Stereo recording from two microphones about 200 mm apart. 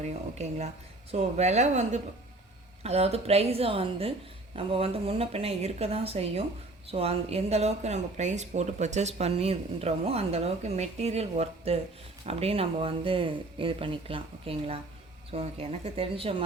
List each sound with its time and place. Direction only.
0.0 s speech: 35° right (ahead or behind)